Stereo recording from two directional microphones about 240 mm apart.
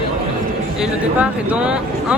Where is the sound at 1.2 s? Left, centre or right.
Centre.